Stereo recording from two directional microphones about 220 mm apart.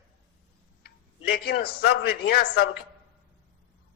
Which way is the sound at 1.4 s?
45° left (ahead or behind).